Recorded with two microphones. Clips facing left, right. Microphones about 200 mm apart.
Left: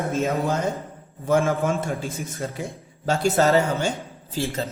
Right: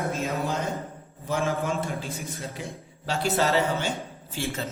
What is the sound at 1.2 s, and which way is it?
A man's voice, 50° left (ahead or behind).